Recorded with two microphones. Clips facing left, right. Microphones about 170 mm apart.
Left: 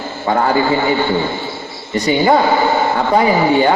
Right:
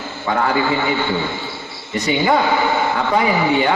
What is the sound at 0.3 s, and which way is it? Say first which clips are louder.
A man's voice: left 4 dB; 35° left (ahead or behind).